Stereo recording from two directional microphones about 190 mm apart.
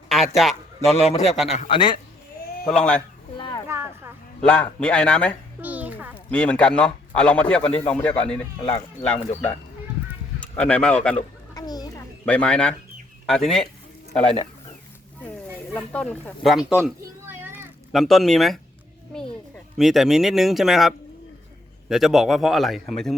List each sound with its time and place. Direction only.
0.1 s a man's voice: centre (ahead or behind)
0.9 s a man's voice: 35° left (ahead or behind)
2.6 s a man's voice: 5° left (ahead or behind)
3.3 s a sound: 25° left (ahead or behind)
3.7 s a sound: 15° right (ahead or behind)
4.4 s a man's voice: 5° left (ahead or behind)
5.6 s a sound: 10° right (ahead or behind)
6.3 s a man's voice: 5° left (ahead or behind)
10.6 s speech: 5° left (ahead or behind)
11.5 s children playing: 20° left (ahead or behind)
12.2 s a man's voice: 5° left (ahead or behind)
15.7 s speech: 5° left (ahead or behind); by 17.7 s 10° right (ahead or behind)
17.9 s a man's voice: centre (ahead or behind)
19.7 s a man's voice: centre (ahead or behind)